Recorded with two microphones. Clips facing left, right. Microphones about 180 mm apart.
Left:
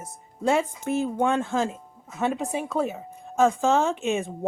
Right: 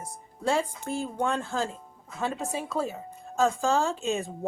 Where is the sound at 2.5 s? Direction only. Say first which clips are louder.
Left 4 dB; 20° left (ahead or behind).